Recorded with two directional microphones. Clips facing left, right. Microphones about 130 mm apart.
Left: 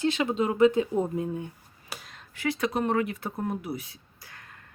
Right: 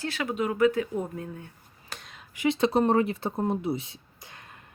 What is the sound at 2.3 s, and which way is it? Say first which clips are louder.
Speech: right 4 dB; 20° right (ahead or behind).